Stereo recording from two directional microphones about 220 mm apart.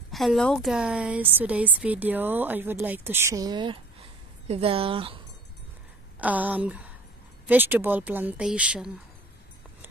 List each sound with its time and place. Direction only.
0.1 s a woman's voice: centre (ahead or behind); by 5.2 s 25° right (ahead or behind)
6.1 s a woman's voice: 5° right (ahead or behind)